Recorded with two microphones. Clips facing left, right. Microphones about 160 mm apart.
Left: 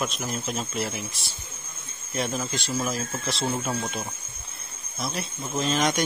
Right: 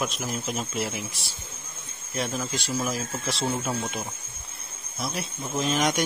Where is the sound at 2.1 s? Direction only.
Centre (ahead or behind).